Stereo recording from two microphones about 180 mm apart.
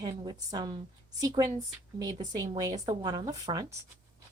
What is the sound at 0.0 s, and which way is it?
Speech, 20° right (ahead or behind).